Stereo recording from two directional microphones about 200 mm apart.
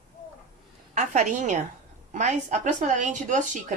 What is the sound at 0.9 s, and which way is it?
A woman's voice, 40° right (ahead or behind).